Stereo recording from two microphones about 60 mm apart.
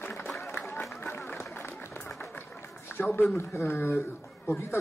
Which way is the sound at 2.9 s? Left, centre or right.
Left.